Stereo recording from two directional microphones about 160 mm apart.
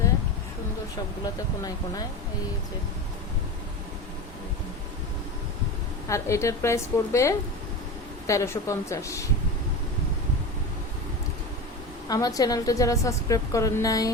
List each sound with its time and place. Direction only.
1.2 s a woman's voice: 25° left (ahead or behind)
6.1 s a woman's voice: 20° left (ahead or behind)
12.0 s a woman's voice: 25° left (ahead or behind)